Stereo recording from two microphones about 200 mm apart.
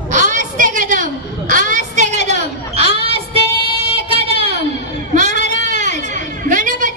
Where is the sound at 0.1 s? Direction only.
40° right (ahead or behind).